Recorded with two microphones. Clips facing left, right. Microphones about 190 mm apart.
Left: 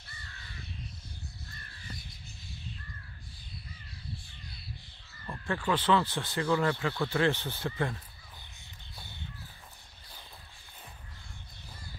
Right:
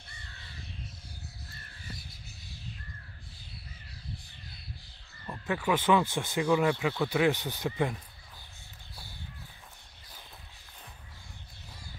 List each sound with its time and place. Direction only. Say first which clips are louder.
5.2 s speech: right 2 dB; 10° right (ahead or behind)
8.9 s crow: even; 20° left (ahead or behind)